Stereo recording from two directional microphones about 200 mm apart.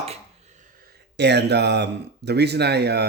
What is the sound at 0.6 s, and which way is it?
Speech, 55° right (ahead or behind).